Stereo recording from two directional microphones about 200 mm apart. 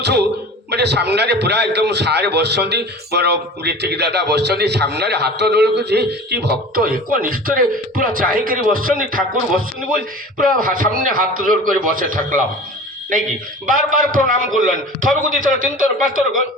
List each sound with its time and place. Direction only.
0.0 s a man's voice: 55° right (ahead or behind)
13.7 s a man's voice: 40° right (ahead or behind)